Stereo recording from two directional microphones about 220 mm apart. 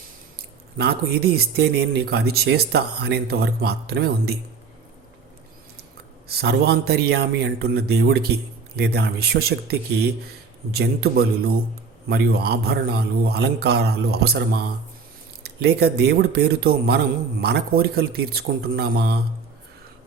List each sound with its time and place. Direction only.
0.8 s a man's voice: 45° right (ahead or behind)
6.2 s a man's voice: 50° right (ahead or behind)